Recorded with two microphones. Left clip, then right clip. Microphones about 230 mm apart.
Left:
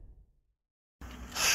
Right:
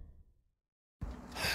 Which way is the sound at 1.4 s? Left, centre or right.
Centre.